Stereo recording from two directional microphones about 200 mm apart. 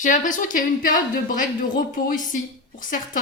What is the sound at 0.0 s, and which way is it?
Speech, 40° left (ahead or behind).